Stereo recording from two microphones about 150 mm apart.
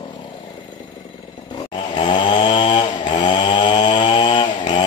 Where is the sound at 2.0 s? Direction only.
30° left (ahead or behind).